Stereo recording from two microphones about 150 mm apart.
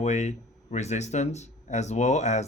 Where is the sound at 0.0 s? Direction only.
50° left (ahead or behind).